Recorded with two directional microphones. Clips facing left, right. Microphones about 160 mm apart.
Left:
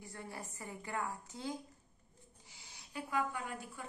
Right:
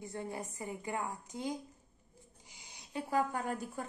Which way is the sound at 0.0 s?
20° right (ahead or behind).